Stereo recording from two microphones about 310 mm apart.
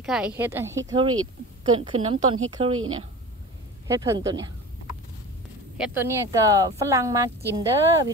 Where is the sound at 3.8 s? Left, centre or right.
Centre.